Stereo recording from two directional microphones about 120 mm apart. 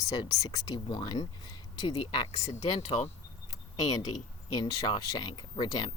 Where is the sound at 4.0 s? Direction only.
35° left (ahead or behind).